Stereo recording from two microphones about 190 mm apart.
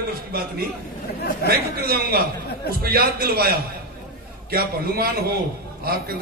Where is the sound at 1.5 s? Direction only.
55° right (ahead or behind).